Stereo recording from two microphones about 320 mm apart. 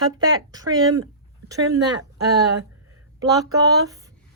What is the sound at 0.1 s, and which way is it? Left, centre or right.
Speech, centre.